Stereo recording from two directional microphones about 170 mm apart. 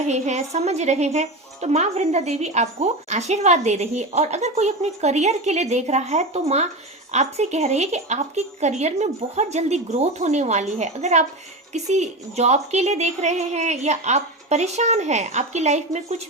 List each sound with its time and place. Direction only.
0.1 s a woman's voice: 40° right (ahead or behind)